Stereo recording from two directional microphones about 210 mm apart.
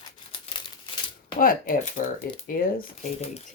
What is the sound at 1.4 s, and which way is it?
Speech, 40° left (ahead or behind).